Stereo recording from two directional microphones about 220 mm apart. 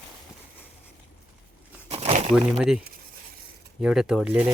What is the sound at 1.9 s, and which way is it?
Crumpling, 30° right (ahead or behind).